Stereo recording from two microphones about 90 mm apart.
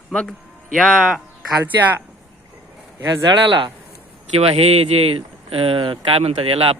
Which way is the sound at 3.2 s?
65° right (ahead or behind).